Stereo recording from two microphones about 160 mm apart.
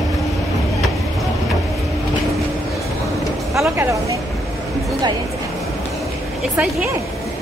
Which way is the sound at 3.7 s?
15° right (ahead or behind).